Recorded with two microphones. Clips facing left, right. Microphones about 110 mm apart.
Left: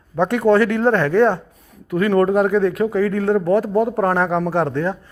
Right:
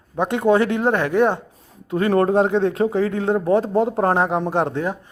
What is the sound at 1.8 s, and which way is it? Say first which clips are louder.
Speech: left 1 dB; 30° right (ahead or behind).